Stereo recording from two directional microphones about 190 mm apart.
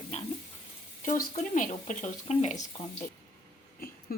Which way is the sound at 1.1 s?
40° left (ahead or behind).